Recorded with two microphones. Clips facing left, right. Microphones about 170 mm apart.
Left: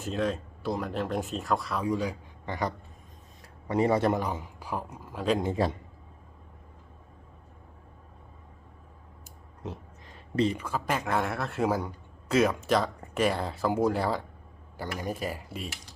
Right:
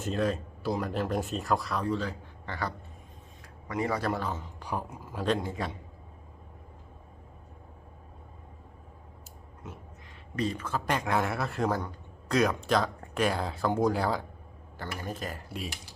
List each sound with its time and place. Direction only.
0.0 s speech: centre (ahead or behind)
1.9 s a man's voice: 10° left (ahead or behind)
3.7 s speech: 25° left (ahead or behind); by 5.4 s centre (ahead or behind)
5.4 s a man's voice: 25° left (ahead or behind)
10.3 s a man's voice: 25° left (ahead or behind)
10.6 s speech: 5° left (ahead or behind)
14.8 s speech: 10° left (ahead or behind)